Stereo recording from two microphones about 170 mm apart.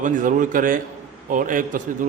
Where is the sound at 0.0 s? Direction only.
50° right (ahead or behind).